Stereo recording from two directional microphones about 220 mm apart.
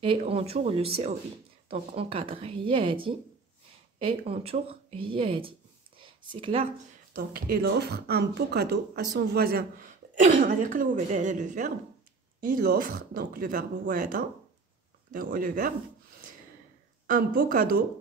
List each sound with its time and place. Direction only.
0.0 s speech: 25° right (ahead or behind)
5.9 s a sound: 25° right (ahead or behind)
7.2 s speech: 45° right (ahead or behind)
17.1 s speech: 40° right (ahead or behind)